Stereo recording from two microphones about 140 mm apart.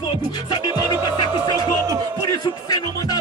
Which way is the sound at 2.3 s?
25° left (ahead or behind).